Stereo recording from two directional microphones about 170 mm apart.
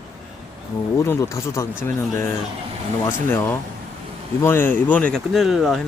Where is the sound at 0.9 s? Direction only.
15° left (ahead or behind).